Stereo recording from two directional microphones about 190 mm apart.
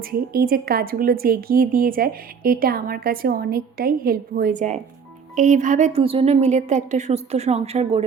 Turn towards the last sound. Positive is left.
turn(degrees=-35)  # may be behind; listen again after turning